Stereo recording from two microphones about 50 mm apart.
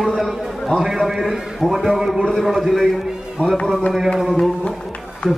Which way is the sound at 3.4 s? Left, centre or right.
Left.